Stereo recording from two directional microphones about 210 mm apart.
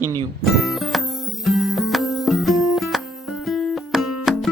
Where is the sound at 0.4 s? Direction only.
Centre (ahead or behind).